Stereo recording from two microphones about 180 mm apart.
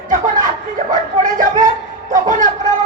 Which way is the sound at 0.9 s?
45° right (ahead or behind).